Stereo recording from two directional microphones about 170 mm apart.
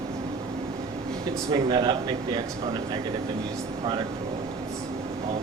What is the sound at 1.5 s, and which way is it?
Speech, 25° right (ahead or behind).